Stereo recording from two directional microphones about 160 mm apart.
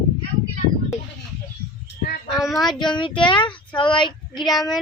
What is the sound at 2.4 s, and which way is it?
Speech, centre (ahead or behind).